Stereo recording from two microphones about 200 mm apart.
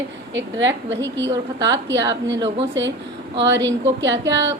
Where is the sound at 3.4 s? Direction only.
65° right (ahead or behind).